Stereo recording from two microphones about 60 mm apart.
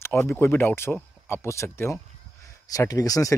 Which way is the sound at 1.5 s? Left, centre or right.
Left.